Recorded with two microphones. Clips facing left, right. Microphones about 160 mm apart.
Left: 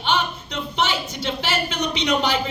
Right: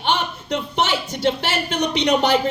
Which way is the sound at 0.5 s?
65° right (ahead or behind).